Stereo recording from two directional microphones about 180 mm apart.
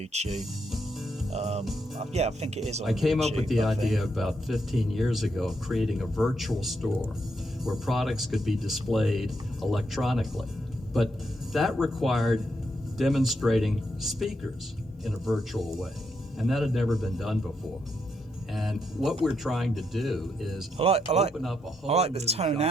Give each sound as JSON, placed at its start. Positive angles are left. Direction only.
{"t": 0.1, "sound": "speech", "side_deg": -35}
{"t": 1.3, "sound": "music", "side_deg": -35}
{"t": 2.0, "sound": "speech", "side_deg": -35}
{"t": 2.8, "sound": "speech", "side_deg": 0}
{"t": 11.5, "sound": "speech", "side_deg": 0}
{"t": 18.5, "sound": "speech", "side_deg": 0}
{"t": 20.7, "sound": "speech", "side_deg": -35}